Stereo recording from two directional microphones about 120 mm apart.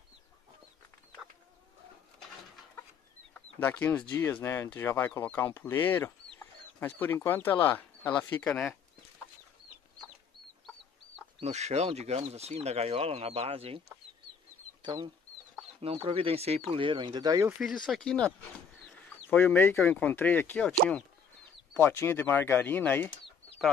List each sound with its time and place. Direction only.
3.3 s chicken: 15° left (ahead or behind)
4.1 s speech: 20° left (ahead or behind)
11.4 s speech: 65° right (ahead or behind)
14.8 s speech: 40° right (ahead or behind)
15.8 s speech: 50° right (ahead or behind); by 17.5 s 35° right (ahead or behind)
17.6 s speech: centre (ahead or behind)
19.3 s speech: 15° left (ahead or behind)
21.7 s speech: 20° left (ahead or behind)